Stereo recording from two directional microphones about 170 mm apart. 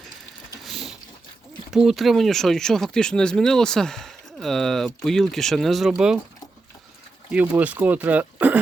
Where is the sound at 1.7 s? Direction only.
Centre (ahead or behind).